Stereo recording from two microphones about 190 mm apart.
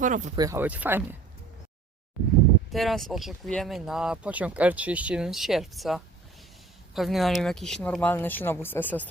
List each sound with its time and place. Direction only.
0.0 s speech: 40° right (ahead or behind)
0.3 s speech: 15° right (ahead or behind)
2.2 s speech: centre (ahead or behind)